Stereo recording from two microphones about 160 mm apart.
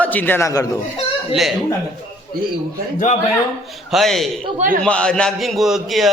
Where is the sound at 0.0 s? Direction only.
10° left (ahead or behind).